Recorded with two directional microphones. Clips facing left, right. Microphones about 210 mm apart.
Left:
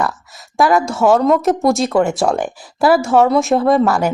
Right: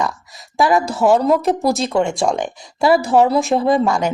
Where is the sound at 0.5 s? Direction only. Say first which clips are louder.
Left 2 dB; centre (ahead or behind).